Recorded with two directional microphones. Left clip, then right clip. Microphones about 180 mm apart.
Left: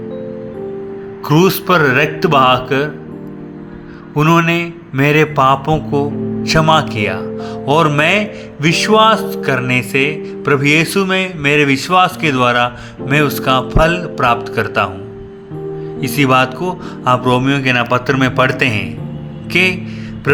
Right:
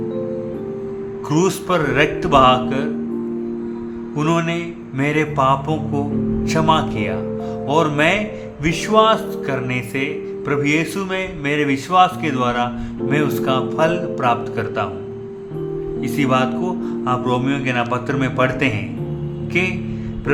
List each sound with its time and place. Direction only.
1.3 s music: 30° left (ahead or behind)
4.1 s music: 25° left (ahead or behind)
16.0 s music: 30° left (ahead or behind)